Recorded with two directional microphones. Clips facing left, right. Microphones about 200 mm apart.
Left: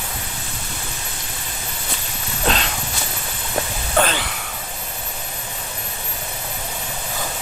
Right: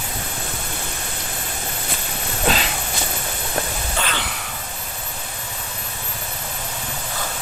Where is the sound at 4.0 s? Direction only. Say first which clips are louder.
Left 9 dB; 55° left (ahead or behind).